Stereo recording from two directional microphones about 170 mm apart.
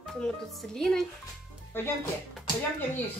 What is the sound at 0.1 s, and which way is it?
Speech, 5° left (ahead or behind).